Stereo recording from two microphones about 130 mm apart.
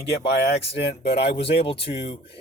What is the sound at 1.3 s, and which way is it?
Speech, 45° left (ahead or behind).